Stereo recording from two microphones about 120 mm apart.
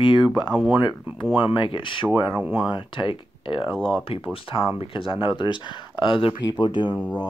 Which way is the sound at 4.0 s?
50° left (ahead or behind).